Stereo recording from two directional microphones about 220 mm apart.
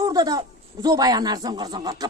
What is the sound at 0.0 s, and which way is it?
Speech, 15° right (ahead or behind).